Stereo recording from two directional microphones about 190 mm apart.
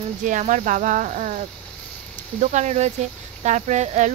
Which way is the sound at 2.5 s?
35° right (ahead or behind).